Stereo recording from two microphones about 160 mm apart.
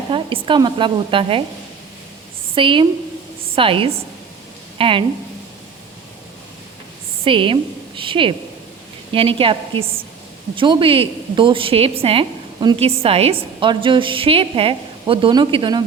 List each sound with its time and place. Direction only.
0.1 s a woman's voice: 30° right (ahead or behind)
2.6 s a woman's voice: 30° right (ahead or behind)
7.3 s a woman's voice: 35° right (ahead or behind)